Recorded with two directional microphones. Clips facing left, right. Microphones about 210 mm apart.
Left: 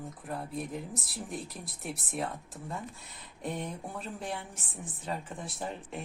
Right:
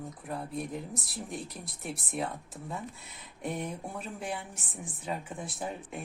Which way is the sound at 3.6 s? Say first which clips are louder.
Right 1 dB; 10° right (ahead or behind).